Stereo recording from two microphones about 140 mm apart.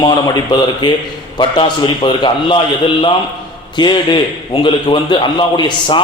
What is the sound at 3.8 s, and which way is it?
A man's voice, 30° left (ahead or behind).